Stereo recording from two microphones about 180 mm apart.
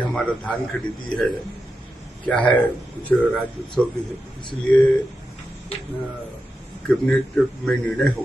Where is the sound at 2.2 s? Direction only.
10° left (ahead or behind).